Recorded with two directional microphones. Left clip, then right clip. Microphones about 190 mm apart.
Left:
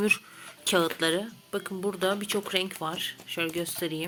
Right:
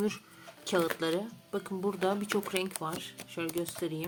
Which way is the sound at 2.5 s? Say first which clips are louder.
Left 5 dB; 10° left (ahead or behind).